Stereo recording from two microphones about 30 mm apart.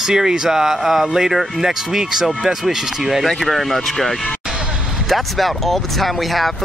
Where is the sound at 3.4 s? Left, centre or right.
Centre.